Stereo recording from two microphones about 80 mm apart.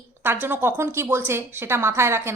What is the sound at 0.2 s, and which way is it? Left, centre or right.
A woman's voice, right.